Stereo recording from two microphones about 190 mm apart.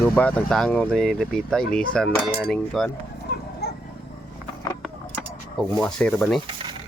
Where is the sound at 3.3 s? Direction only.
55° left (ahead or behind).